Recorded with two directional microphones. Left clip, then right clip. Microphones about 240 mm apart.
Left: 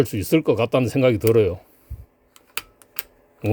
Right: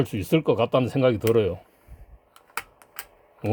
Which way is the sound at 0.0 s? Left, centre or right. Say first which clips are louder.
Left 4 dB; centre.